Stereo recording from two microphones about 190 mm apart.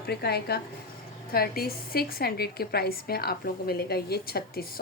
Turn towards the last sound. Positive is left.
turn(degrees=55)  # may be behind; listen again after turning